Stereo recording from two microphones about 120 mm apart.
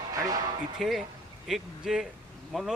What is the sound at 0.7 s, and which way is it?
Speech, centre (ahead or behind).